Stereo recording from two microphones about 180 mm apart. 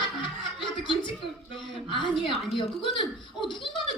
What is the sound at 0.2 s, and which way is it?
Chuckle, 25° left (ahead or behind).